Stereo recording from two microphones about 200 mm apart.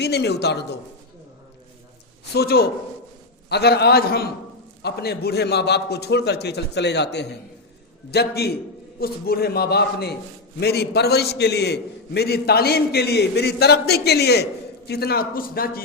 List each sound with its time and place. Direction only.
0.0 s a man's voice: 55° left (ahead or behind)
2.3 s a man's voice: 50° left (ahead or behind)